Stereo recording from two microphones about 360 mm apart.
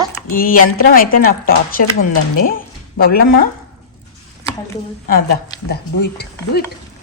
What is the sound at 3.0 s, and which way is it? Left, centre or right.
Speech, left.